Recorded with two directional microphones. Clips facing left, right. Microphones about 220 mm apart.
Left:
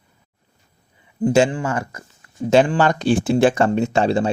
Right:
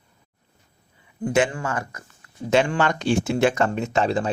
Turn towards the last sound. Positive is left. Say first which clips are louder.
# left 4 dB
turn(degrees=30)  # may be behind; listen again after turning